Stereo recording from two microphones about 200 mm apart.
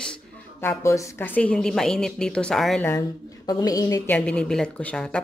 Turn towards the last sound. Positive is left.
turn(degrees=5)  # may be behind; listen again after turning